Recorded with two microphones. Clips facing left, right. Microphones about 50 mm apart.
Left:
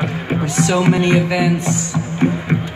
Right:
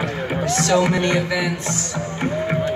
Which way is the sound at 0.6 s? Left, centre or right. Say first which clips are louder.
Left 3 dB; centre.